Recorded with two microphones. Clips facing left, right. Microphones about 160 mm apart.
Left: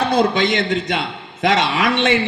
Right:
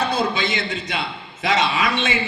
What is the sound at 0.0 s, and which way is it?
A man's voice, 65° left (ahead or behind).